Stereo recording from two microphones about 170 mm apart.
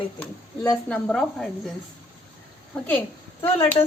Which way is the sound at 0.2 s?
20° left (ahead or behind).